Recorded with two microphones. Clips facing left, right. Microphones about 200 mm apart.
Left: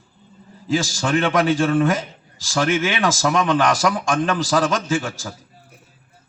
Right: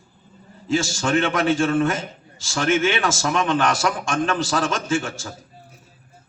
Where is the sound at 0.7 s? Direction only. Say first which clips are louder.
Even; 35° left (ahead or behind).